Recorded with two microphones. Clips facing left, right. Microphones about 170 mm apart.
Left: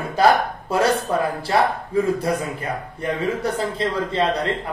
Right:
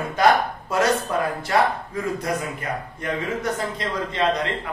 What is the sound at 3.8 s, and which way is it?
Speech, 30° left (ahead or behind).